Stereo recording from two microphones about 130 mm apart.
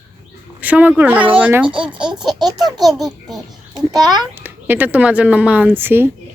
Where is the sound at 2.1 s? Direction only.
35° right (ahead or behind).